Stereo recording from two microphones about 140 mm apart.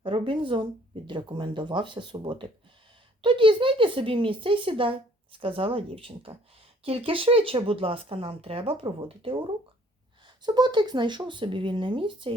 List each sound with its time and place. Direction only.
0.0 s speech: 40° right (ahead or behind)